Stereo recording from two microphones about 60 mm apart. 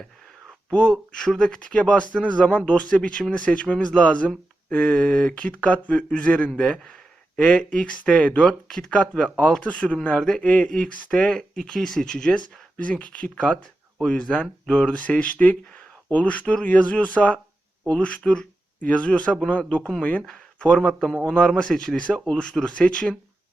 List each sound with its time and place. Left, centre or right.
0.7 s a man's voice: centre
21.9 s speech: centre